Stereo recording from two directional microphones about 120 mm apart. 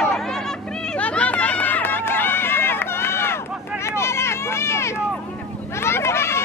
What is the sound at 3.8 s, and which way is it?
Vehicle, 20° left (ahead or behind).